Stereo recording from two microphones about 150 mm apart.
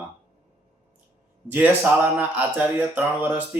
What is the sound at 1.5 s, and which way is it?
Speech, 10° right (ahead or behind).